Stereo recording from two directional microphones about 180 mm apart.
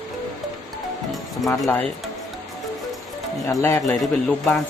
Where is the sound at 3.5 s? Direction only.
15° left (ahead or behind).